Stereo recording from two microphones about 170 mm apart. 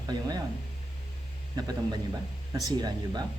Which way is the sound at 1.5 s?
25° right (ahead or behind).